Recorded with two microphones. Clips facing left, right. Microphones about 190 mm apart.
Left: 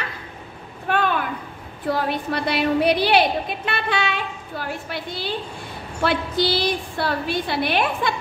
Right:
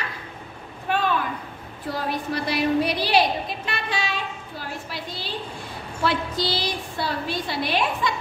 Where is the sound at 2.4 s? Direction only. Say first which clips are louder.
Left 3 dB; 60° left (ahead or behind).